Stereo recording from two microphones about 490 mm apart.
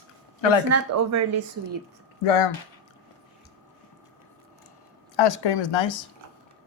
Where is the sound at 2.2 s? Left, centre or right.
Left.